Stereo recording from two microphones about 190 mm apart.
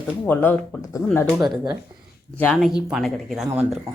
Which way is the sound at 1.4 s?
20° right (ahead or behind).